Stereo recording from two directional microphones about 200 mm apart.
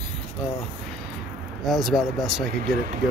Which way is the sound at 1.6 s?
Centre (ahead or behind).